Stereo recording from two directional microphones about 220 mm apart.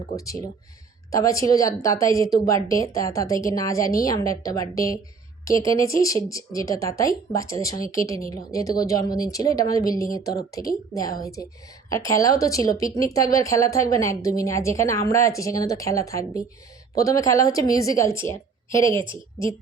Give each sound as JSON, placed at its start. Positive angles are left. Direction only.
{"t": 0.2, "sound": "a woman's voice", "side_deg": 15}
{"t": 11.9, "sound": "a woman's voice", "side_deg": 15}